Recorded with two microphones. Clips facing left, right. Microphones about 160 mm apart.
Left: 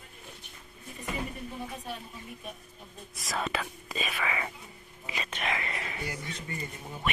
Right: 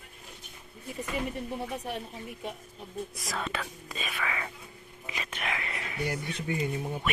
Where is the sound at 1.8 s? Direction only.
75° right (ahead or behind).